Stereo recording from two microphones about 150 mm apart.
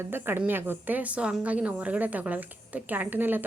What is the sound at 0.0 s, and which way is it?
A woman's voice, 15° right (ahead or behind).